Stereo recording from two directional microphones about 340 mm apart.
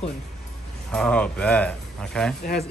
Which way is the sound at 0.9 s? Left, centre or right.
Centre.